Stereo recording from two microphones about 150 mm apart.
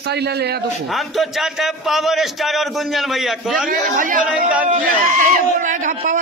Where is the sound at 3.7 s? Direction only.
65° right (ahead or behind).